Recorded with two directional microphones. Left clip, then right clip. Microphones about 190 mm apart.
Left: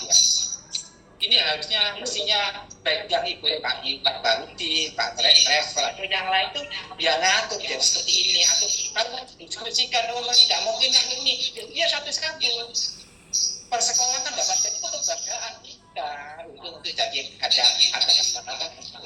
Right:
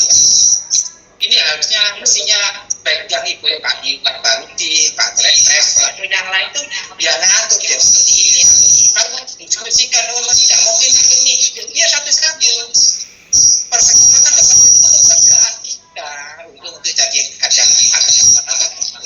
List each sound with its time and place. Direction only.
0.0 s cricket: 5° right (ahead or behind)
1.2 s a woman's voice: 10° right (ahead or behind)
13.7 s cricket: 5° right (ahead or behind)
16.8 s music: 10° right (ahead or behind)